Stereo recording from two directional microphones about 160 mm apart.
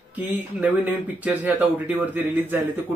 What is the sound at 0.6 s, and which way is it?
A man's voice, 10° right (ahead or behind).